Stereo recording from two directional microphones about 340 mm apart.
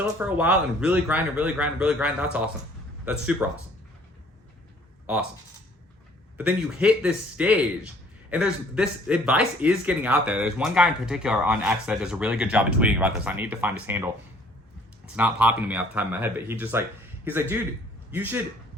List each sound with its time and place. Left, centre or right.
0.0 s speech: centre
6.3 s speech: centre
15.1 s speech: centre